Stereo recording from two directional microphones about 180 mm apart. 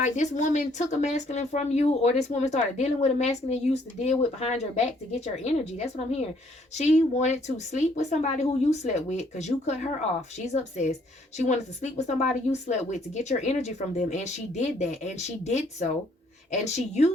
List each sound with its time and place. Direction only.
0.0 s speech: 40° left (ahead or behind)